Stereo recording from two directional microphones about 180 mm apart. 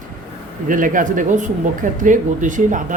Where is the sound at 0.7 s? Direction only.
45° right (ahead or behind).